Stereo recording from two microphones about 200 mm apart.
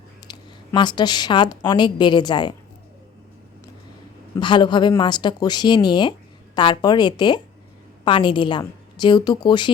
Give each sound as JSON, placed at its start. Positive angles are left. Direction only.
{"t": 0.3, "sound": "a woman's voice", "side_deg": 20}
{"t": 4.4, "sound": "speech", "side_deg": 25}